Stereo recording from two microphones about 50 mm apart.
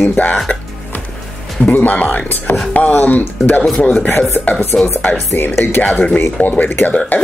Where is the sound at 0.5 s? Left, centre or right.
Left.